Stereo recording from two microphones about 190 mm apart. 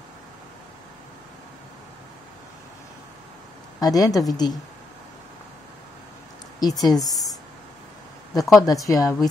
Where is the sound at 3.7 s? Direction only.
20° left (ahead or behind).